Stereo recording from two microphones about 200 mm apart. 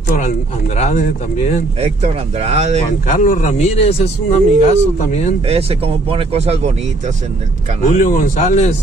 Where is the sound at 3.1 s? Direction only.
40° left (ahead or behind).